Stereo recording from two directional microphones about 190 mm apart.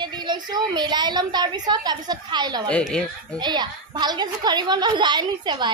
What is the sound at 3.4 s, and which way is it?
A woman's voice, 20° right (ahead or behind).